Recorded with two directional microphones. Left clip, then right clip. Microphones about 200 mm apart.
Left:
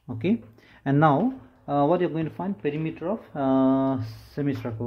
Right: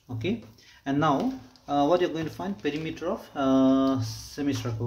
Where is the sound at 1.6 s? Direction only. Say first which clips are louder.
Left 1 dB; 30° left (ahead or behind).